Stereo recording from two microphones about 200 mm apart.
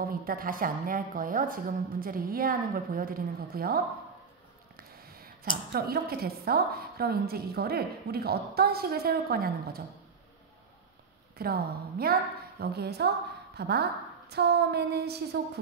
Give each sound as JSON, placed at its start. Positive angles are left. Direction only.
{"t": 0.0, "sound": "a woman's voice", "side_deg": -45}
{"t": 11.3, "sound": "a woman's voice", "side_deg": -50}
{"t": 14.3, "sound": "a sound", "side_deg": -55}